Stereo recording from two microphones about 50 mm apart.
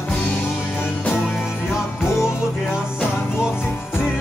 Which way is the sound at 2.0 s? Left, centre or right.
Left.